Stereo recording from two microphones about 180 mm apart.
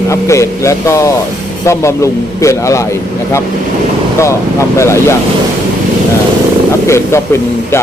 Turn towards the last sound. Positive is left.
turn(degrees=15)  # may be behind; listen again after turning